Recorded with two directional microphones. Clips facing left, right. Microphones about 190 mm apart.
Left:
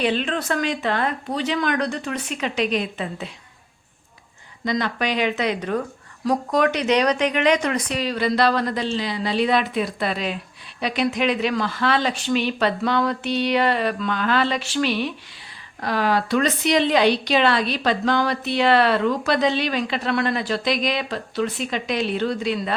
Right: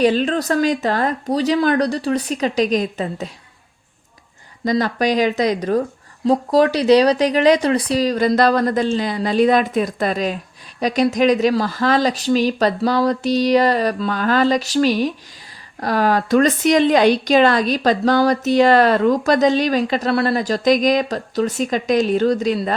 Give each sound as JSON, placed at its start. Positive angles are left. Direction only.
{"t": 0.0, "sound": "speech", "side_deg": -40}
{"t": 4.6, "sound": "a woman's voice", "side_deg": -40}